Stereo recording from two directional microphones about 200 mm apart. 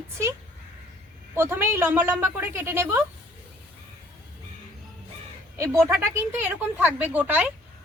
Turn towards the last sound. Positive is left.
turn(degrees=-10)  # may be behind; listen again after turning